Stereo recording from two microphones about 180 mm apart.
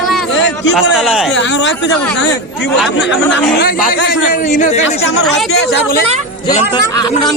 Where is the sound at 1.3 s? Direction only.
85° left.